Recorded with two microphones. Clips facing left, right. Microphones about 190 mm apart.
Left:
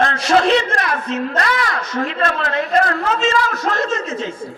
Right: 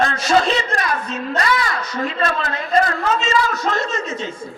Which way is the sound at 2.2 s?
65° left (ahead or behind).